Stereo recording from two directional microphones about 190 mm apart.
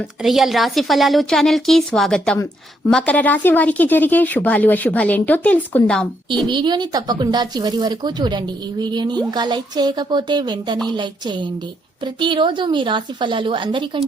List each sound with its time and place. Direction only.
0.2 s a woman's voice: centre (ahead or behind)
6.5 s speech: 25° right (ahead or behind)